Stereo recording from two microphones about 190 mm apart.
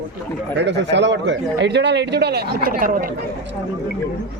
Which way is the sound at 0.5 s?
65° right (ahead or behind).